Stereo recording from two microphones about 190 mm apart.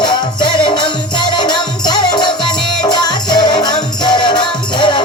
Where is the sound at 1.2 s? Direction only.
25° left (ahead or behind).